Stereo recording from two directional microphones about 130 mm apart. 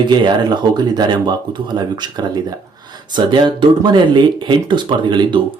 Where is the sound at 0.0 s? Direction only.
35° right (ahead or behind).